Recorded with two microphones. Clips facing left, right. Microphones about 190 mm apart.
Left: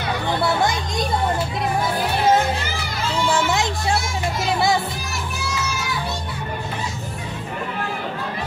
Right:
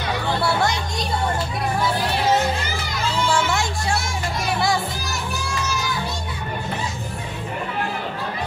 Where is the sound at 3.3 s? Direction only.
20° left (ahead or behind).